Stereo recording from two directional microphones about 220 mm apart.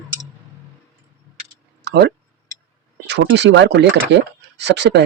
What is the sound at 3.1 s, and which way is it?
Speech, 50° right (ahead or behind).